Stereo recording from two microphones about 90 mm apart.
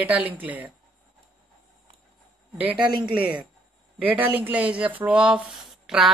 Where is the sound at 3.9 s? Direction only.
15° right (ahead or behind).